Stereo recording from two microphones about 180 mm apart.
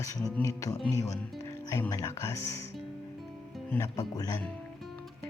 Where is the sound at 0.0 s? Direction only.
15° left (ahead or behind).